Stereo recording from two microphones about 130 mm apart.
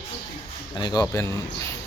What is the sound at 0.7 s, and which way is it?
Speech, 35° left (ahead or behind).